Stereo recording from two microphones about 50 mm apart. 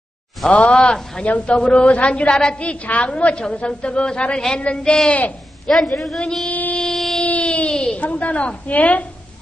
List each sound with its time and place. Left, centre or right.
0.5 s speech: left
1.2 s a woman's voice: left
5.7 s a man's voice: centre
6.5 s music: left
6.8 s a sound: centre
7.2 s a sound: left
8.0 s a woman's voice: left